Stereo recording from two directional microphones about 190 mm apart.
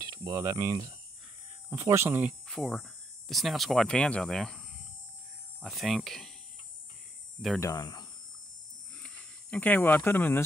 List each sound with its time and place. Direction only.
0.0 s hum: 20° right (ahead or behind)
1.7 s speech: 15° right (ahead or behind)
2.4 s speech: centre (ahead or behind)
5.6 s speech: centre (ahead or behind)
7.6 s speech: 20° left (ahead or behind)
8.9 s a sound: 5° left (ahead or behind)